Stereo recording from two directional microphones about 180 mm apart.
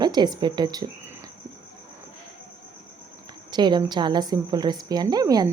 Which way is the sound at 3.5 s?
25° right (ahead or behind).